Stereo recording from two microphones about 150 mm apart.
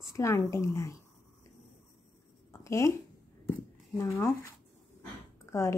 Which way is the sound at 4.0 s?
20° left (ahead or behind).